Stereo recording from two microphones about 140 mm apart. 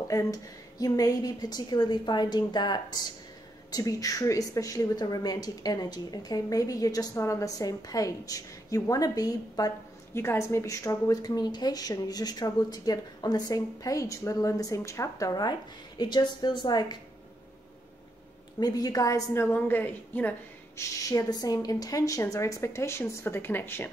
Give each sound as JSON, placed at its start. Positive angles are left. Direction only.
{"t": 0.1, "sound": "a woman's voice", "side_deg": 25}
{"t": 18.6, "sound": "a woman's voice", "side_deg": 25}
{"t": 21.1, "sound": "a woman's voice", "side_deg": 25}